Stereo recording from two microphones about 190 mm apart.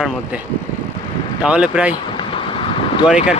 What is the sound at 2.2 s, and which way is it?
Vehicle, 25° left (ahead or behind).